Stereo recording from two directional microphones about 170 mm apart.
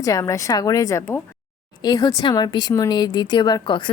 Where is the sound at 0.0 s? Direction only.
20° left (ahead or behind).